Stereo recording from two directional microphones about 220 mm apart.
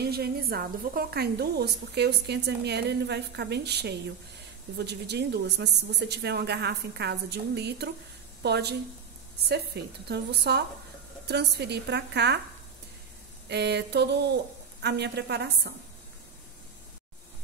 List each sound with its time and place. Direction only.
0.0 s a woman's voice: 45° right (ahead or behind)
13.5 s a woman's voice: 50° right (ahead or behind)